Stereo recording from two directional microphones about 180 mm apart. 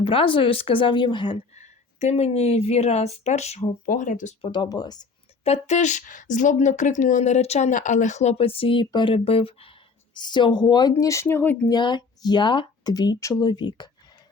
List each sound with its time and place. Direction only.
0.0 s speech: 30° left (ahead or behind)
1.5 s speech: 40° left (ahead or behind)
4.4 s speech: 30° left (ahead or behind)
5.4 s speech: 35° left (ahead or behind); by 11.5 s 10° left (ahead or behind)
11.7 s speech: 25° left (ahead or behind)